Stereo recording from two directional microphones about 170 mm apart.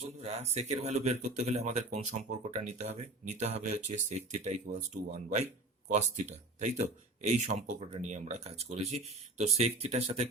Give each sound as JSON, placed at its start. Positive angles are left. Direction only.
{"t": 0.2, "sound": "speech", "side_deg": -40}